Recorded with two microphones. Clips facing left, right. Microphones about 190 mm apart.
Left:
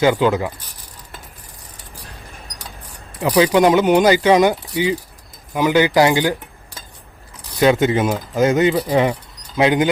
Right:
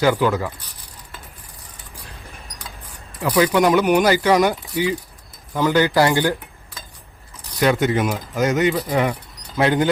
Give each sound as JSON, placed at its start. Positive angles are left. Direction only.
{"t": 0.0, "sound": "speech", "side_deg": 20}
{"t": 3.2, "sound": "speech", "side_deg": 20}
{"t": 7.6, "sound": "speech", "side_deg": 20}